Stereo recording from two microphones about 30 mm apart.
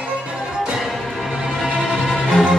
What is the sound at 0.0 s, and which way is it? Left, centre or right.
Music, right.